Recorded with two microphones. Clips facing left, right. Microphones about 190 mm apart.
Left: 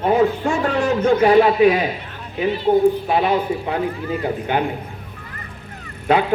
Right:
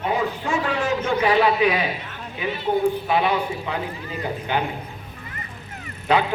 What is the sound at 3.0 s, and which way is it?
A man's voice, 40° left (ahead or behind).